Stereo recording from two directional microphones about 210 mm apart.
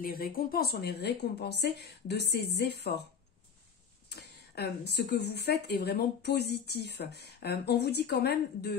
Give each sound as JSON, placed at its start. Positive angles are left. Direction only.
{"t": 0.0, "sound": "speech", "side_deg": 45}
{"t": 4.1, "sound": "speech", "side_deg": 50}